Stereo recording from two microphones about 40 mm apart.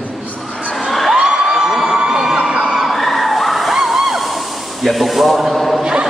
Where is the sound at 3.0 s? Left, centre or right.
Centre.